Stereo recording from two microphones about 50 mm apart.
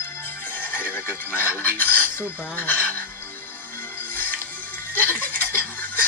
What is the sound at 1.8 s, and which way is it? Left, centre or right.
Dishes, left.